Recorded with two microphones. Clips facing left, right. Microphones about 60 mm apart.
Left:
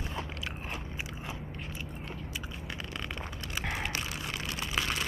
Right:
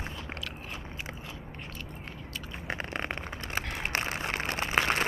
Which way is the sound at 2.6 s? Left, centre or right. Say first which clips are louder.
Right 9 dB; right.